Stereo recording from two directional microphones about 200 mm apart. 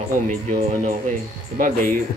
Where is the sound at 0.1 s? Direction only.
40° right (ahead or behind).